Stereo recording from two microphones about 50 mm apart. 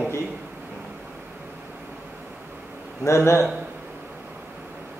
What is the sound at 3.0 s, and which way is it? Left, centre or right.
Speech, left.